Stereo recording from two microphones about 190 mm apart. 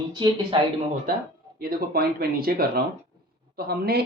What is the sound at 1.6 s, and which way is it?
Speech, 50° right (ahead or behind).